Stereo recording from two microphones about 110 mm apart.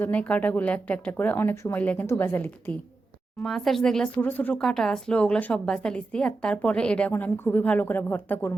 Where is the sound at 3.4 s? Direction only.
Centre (ahead or behind).